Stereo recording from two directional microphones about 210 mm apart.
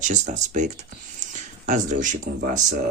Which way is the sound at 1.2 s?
35° right (ahead or behind).